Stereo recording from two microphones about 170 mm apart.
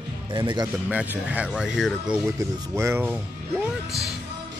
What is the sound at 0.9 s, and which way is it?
Speech, 10° right (ahead or behind).